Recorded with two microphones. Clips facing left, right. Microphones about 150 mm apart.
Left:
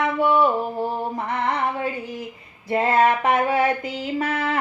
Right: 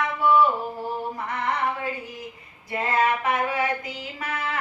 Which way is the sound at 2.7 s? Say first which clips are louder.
Left 5 dB; 30° left (ahead or behind).